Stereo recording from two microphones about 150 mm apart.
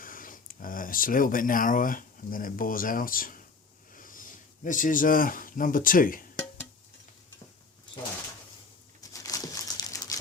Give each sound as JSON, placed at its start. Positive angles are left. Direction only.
{"t": 0.0, "sound": "speech", "side_deg": 65}
{"t": 9.0, "sound": "crumpling", "side_deg": 25}